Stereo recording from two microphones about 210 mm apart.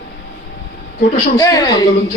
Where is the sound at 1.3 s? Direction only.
15° left (ahead or behind).